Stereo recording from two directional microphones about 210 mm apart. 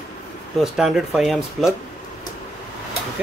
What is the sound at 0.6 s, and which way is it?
Speech, centre (ahead or behind).